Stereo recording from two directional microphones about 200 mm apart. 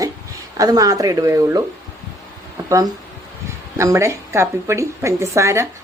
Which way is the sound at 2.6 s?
15° right (ahead or behind).